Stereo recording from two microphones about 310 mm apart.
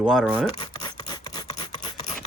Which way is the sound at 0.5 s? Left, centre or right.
Centre.